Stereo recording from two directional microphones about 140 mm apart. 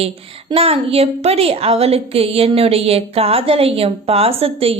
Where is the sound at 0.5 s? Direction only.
45° right (ahead or behind).